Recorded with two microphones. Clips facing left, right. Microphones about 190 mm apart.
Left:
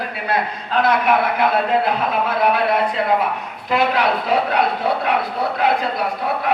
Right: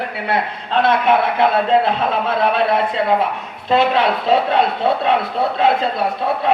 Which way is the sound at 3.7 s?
25° right (ahead or behind).